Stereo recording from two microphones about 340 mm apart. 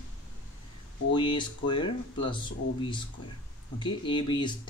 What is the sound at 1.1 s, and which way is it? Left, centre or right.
Speech, centre.